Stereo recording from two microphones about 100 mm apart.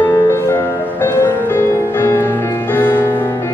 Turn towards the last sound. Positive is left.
turn(degrees=30)  # may be behind; listen again after turning